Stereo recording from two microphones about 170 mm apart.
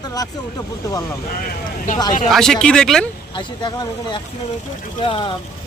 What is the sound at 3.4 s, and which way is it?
Speech, 25° left (ahead or behind).